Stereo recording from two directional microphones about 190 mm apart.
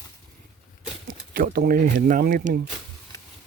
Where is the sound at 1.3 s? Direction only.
50° right (ahead or behind).